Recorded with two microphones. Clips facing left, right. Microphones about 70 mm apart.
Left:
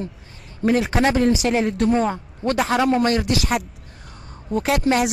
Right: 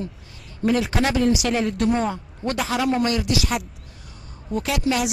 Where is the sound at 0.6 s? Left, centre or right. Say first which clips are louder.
Left 2 dB; left.